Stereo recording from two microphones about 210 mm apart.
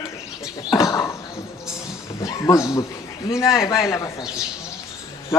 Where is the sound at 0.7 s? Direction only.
15° left (ahead or behind).